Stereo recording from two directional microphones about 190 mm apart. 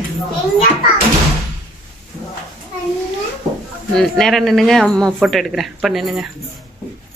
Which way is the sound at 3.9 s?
Centre (ahead or behind).